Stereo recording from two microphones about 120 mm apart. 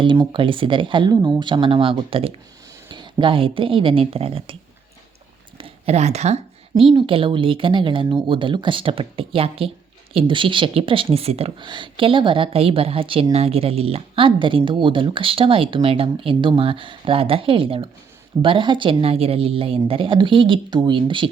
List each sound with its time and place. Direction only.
0.3 s speech: 45° right (ahead or behind)
2.9 s speech: 40° right (ahead or behind)
5.5 s a sound: 55° right (ahead or behind)
6.9 s speech: 45° right (ahead or behind)
11.6 s speech: 40° right (ahead or behind)